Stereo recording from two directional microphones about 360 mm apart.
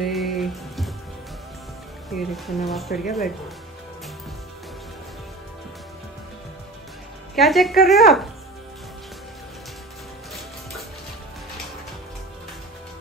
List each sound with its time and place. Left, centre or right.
0.1 s music: centre
2.1 s speech: centre
2.9 s speech: left
7.3 s speech: centre